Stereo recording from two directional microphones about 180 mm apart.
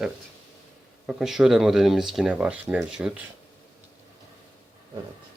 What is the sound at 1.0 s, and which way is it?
Speech, centre (ahead or behind).